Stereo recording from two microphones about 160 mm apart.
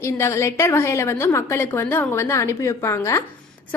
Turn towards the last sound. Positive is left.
turn(degrees=15)  # may be behind; listen again after turning